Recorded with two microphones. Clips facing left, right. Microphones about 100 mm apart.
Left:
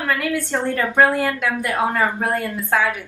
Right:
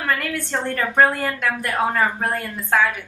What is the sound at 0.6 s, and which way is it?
A woman's voice, 5° left (ahead or behind).